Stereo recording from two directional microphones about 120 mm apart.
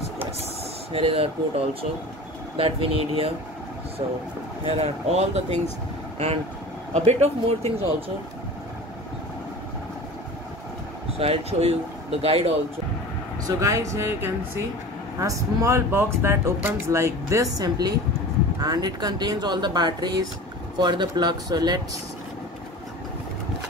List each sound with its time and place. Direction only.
0.9 s speech: 55° right (ahead or behind)
4.6 s speech: 65° right (ahead or behind)
11.1 s speech: 55° right (ahead or behind)
13.5 s speech: 25° right (ahead or behind)